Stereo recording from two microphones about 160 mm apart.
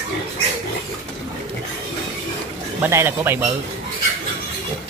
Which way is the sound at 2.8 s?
15° right (ahead or behind).